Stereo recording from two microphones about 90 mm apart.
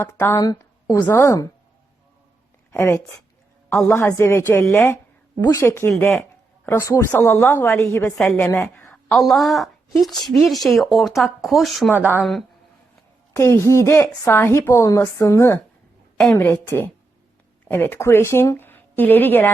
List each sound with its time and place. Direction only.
0.0 s a woman's voice: 25° left (ahead or behind)
0.3 s a woman's voice: 40° left (ahead or behind)
2.7 s a woman's voice: 30° left (ahead or behind)
5.4 s a woman's voice: 40° left (ahead or behind)
5.6 s a woman's voice: 25° left (ahead or behind)
8.9 s a woman's voice: 5° left (ahead or behind)
11.9 s a woman's voice: 20° right (ahead or behind)
13.3 s a woman's voice: 30° left (ahead or behind)